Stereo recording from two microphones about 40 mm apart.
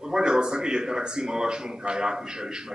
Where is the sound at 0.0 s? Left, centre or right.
Centre.